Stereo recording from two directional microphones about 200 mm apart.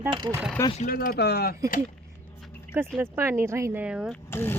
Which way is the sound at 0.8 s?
45° left (ahead or behind).